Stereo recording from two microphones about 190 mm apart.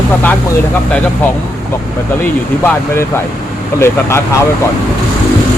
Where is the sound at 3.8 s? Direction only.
15° left (ahead or behind).